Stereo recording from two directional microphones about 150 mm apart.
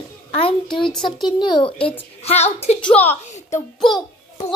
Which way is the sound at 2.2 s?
45° left (ahead or behind).